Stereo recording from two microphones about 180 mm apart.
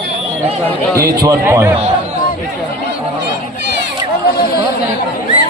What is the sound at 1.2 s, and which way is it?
Speech, 15° right (ahead or behind).